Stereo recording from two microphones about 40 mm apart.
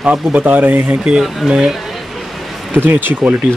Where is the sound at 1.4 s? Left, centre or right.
Centre.